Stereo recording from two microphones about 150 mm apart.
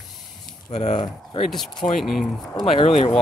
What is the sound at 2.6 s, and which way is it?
Speech, 45° left (ahead or behind).